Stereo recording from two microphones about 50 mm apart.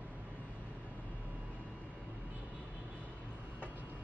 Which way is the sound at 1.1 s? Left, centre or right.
Right.